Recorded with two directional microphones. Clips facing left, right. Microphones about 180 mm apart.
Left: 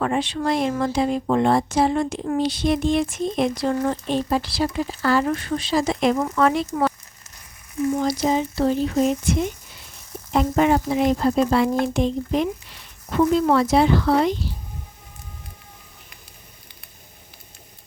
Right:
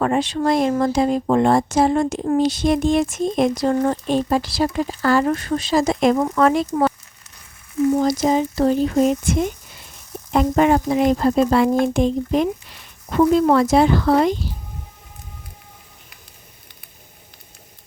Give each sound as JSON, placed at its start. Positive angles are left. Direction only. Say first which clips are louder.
{"t": 0.0, "sound": "speech", "louder": "right 4 dB", "side_deg": -40}
{"t": 8.0, "sound": "speech", "louder": "right 3 dB", "side_deg": -45}